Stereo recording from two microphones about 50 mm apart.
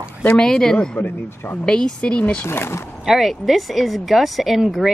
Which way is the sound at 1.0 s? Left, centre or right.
Left.